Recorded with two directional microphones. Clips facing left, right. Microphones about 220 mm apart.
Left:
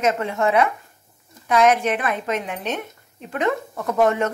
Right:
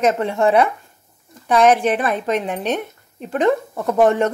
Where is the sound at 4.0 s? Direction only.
35° right (ahead or behind).